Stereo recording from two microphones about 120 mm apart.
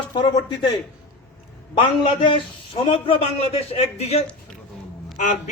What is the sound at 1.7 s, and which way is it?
A man's voice, 45° left (ahead or behind).